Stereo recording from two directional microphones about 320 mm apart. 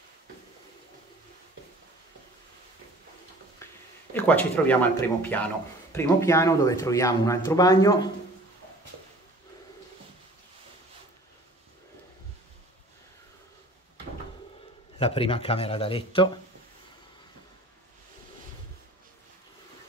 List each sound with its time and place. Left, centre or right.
4.1 s speech: centre
15.0 s speech: centre